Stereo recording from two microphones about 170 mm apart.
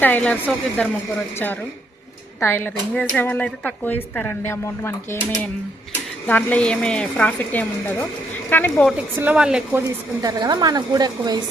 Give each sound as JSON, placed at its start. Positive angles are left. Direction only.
{"t": 0.0, "sound": "speech", "side_deg": 10}
{"t": 2.4, "sound": "speech", "side_deg": 15}
{"t": 6.2, "sound": "speech", "side_deg": 10}
{"t": 8.9, "sound": "a woman's voice", "side_deg": -10}
{"t": 10.2, "sound": "a woman's voice", "side_deg": -25}